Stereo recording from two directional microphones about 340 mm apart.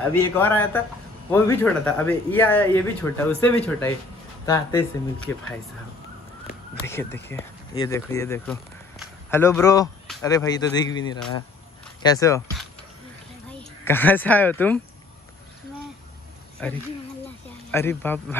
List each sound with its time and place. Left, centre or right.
0.1 s speech: centre
6.9 s speech: centre
16.6 s speech: centre